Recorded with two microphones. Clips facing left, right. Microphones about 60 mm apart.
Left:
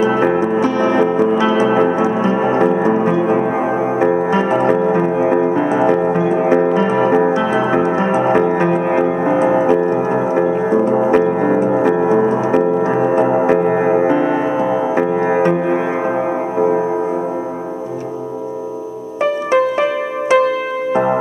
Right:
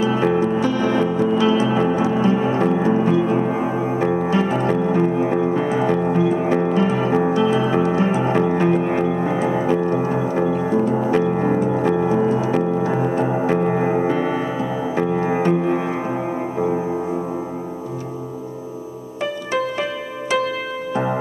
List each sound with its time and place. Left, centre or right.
0.0 s music: left
19.5 s music: left